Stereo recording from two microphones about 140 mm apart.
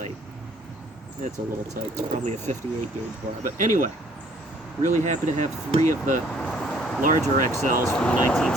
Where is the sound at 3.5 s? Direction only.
70° right (ahead or behind).